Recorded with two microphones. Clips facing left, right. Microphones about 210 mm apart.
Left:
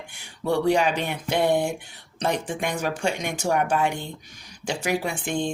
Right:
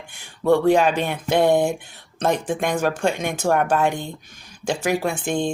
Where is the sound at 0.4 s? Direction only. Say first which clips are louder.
Right 5 dB; 50° right (ahead or behind).